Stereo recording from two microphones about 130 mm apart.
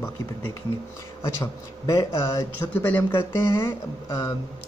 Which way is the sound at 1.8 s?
25° left (ahead or behind).